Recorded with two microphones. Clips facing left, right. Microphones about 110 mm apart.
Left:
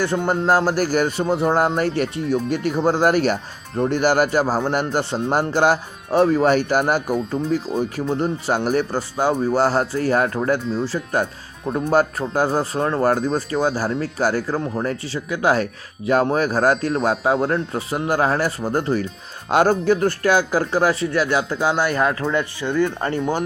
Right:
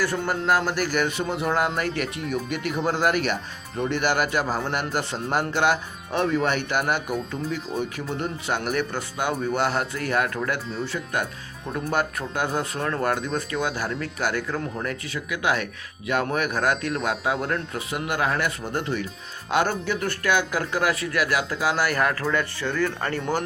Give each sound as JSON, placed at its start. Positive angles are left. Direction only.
{"t": 0.0, "sound": "speech", "side_deg": 25}
{"t": 10.6, "sound": "speech", "side_deg": 0}
{"t": 10.8, "sound": "speech", "side_deg": 35}